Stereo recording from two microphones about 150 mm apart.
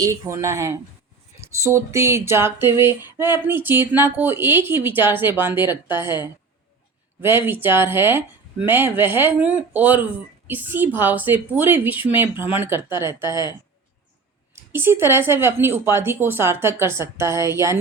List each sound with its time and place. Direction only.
0.0 s speech: 20° right (ahead or behind)